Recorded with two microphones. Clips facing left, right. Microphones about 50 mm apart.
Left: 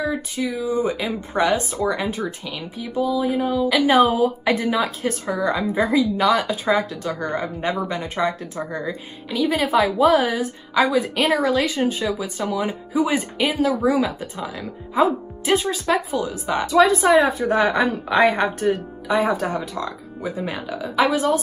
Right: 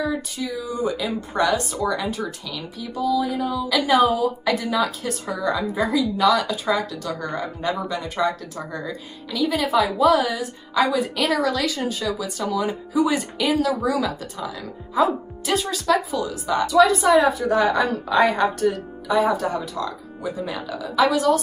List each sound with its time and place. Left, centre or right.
0.4 s speech: left